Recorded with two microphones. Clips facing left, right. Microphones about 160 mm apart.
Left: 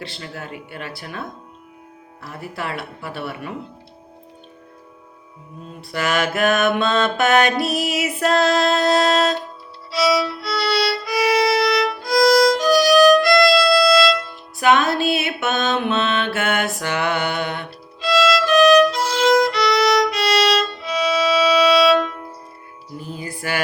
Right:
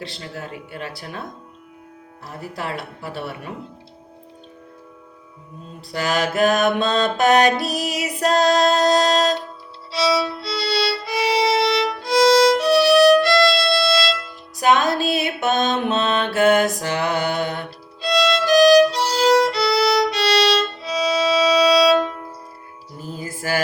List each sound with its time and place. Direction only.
0.2 s music: 35° right (ahead or behind)
2.6 s music: 35° right (ahead or behind)
5.9 s music: 35° right (ahead or behind)
9.9 s violin: 25° right (ahead or behind)
14.6 s music: 40° right (ahead or behind)
15.1 s mantra: 40° right (ahead or behind)
23.1 s music: 40° right (ahead or behind)